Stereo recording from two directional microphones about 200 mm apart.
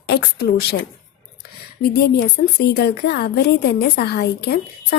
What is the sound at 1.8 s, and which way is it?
A woman's voice, 50° left (ahead or behind).